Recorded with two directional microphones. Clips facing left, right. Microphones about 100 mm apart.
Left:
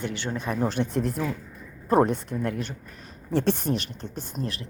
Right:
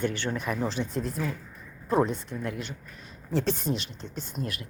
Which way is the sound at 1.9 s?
50° left (ahead or behind).